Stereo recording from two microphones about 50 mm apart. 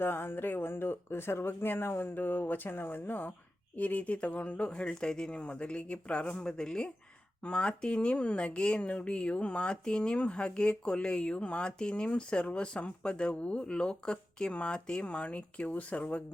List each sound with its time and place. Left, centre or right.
0.0 s speech: left
6.5 s speech: centre